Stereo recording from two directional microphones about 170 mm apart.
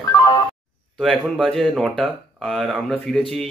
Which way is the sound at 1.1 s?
Centre (ahead or behind).